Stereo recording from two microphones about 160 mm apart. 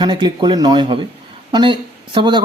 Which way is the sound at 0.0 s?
25° right (ahead or behind).